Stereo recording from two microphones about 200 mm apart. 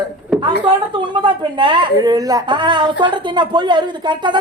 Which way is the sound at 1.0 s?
25° right (ahead or behind).